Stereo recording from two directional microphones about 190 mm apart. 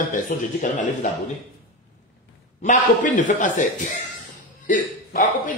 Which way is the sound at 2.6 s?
40° left (ahead or behind).